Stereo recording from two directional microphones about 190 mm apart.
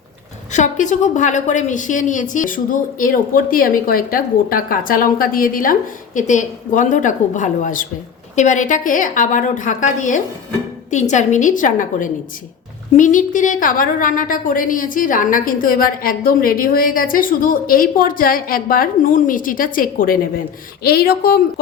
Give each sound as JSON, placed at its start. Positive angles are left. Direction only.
{"t": 0.5, "sound": "a woman's voice", "side_deg": 40}